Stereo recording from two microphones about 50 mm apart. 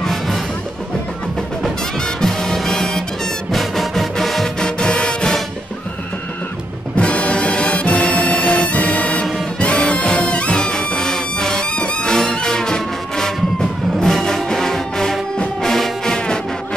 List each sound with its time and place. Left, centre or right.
0.0 s music: centre
2.2 s music: centre
4.6 s music: centre
7.0 s music: left